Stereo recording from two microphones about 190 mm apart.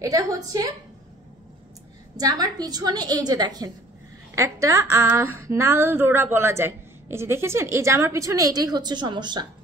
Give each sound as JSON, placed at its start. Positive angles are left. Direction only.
{"t": 0.0, "sound": "a woman's voice", "side_deg": -20}
{"t": 2.1, "sound": "a woman's voice", "side_deg": -20}